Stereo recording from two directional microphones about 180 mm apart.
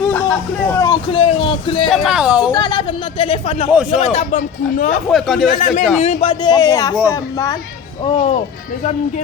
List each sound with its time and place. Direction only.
0.0 s a sound: 10° left (ahead or behind)
1.1 s speech: 30° left (ahead or behind)
1.9 s speech: centre (ahead or behind)
2.5 s speech: 25° left (ahead or behind); by 5.0 s 45° left (ahead or behind)
5.1 s speech: centre (ahead or behind)
5.5 s speech: 45° left (ahead or behind); by 7.5 s 20° left (ahead or behind)
8.0 s speech: 30° left (ahead or behind)
8.8 s speech: 40° left (ahead or behind)